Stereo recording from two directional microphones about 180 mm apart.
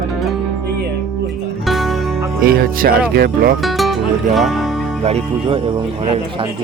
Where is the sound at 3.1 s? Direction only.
60° right (ahead or behind).